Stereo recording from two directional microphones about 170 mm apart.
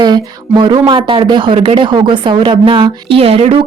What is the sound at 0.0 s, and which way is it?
Speech, 25° right (ahead or behind).